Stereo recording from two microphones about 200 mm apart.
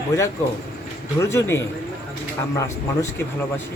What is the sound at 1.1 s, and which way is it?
Speech, 15° left (ahead or behind).